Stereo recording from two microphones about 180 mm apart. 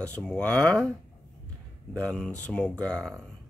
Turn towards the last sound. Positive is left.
turn(degrees=5)  # may be behind; listen again after turning